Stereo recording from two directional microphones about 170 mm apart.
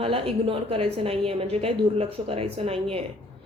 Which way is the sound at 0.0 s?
35° right (ahead or behind).